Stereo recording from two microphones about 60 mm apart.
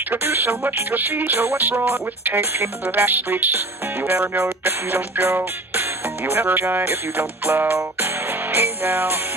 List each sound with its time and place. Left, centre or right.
0.1 s music: right